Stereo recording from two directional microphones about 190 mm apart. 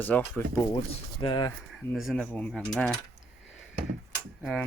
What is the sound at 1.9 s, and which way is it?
Speech, centre (ahead or behind).